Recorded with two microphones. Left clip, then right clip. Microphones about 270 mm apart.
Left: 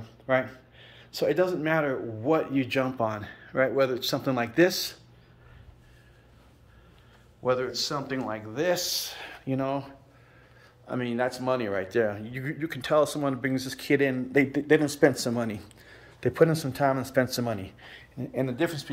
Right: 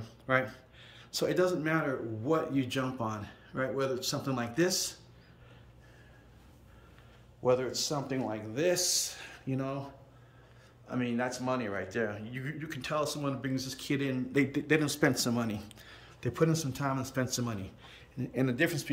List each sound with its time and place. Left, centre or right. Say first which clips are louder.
0.0 s speech: left 4 dB; centre
7.4 s speech: left 2 dB; centre
10.9 s a man's voice: left 5 dB; left
18.1 s speech: left 2 dB; centre